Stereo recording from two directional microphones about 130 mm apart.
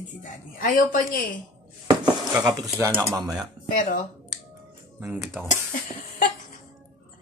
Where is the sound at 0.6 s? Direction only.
90° left.